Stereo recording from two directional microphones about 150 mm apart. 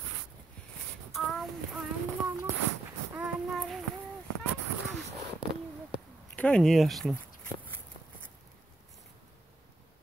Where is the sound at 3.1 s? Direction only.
Centre (ahead or behind).